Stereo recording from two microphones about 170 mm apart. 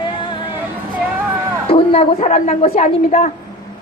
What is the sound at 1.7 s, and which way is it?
A woman's voice, 35° left (ahead or behind).